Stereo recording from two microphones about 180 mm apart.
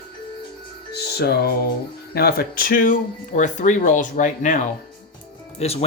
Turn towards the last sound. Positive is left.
turn(degrees=35)  # may be behind; listen again after turning